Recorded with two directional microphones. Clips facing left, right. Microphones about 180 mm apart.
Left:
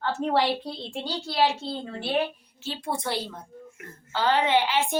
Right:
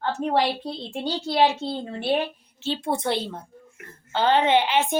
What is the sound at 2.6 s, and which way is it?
A woman's voice, 25° right (ahead or behind).